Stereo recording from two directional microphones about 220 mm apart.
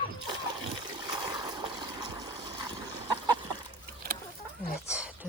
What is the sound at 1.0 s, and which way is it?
Water, 20° right (ahead or behind).